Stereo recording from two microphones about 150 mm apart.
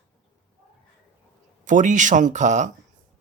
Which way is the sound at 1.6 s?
55° right (ahead or behind).